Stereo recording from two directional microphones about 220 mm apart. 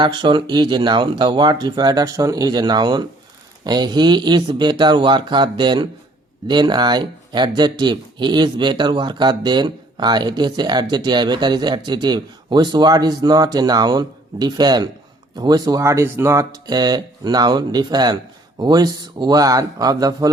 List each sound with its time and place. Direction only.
0.0 s speech: 20° right (ahead or behind)